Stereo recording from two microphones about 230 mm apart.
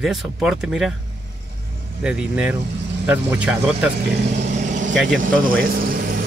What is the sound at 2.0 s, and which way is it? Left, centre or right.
Speech, centre.